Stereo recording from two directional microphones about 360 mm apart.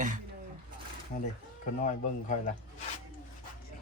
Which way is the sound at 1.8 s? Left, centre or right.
Left.